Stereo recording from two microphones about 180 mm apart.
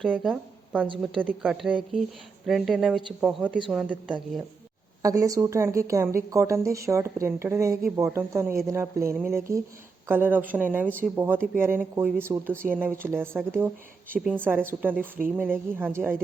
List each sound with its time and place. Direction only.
0.1 s a woman's voice: 5° right (ahead or behind)
5.0 s speech: 20° right (ahead or behind)